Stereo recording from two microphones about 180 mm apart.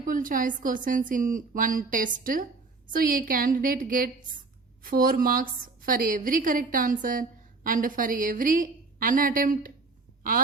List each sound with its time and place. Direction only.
0.0 s a woman's voice: 50° right (ahead or behind)